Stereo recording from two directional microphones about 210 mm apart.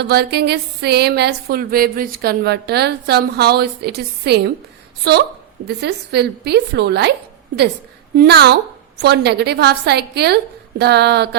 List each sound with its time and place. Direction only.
0.0 s speech: 50° right (ahead or behind)
8.1 s speech: 50° right (ahead or behind)